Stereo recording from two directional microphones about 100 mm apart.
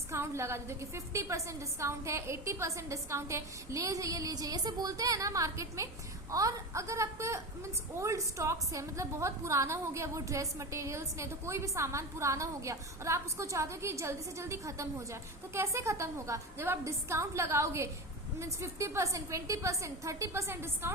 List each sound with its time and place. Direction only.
0.1 s a woman's voice: 25° right (ahead or behind)